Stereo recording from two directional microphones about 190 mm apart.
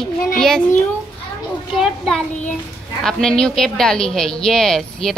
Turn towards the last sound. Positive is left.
turn(degrees=0)  # may be behind; listen again after turning